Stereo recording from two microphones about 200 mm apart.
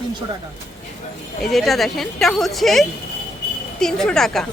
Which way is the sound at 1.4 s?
Centre (ahead or behind).